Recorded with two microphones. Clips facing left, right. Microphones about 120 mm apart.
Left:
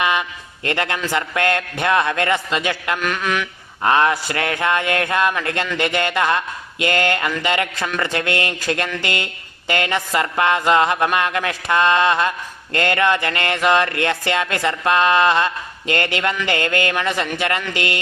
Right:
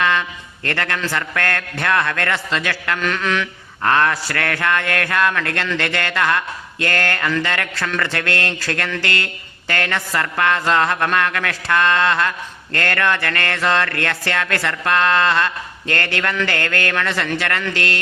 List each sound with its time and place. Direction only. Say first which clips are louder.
0.0 s a man's voice: right 1 dB; 15° left (ahead or behind)